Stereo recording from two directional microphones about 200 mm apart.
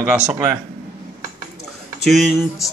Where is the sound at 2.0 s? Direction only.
Centre (ahead or behind).